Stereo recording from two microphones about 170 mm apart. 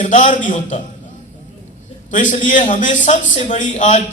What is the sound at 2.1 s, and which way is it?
A man's voice, 45° left (ahead or behind).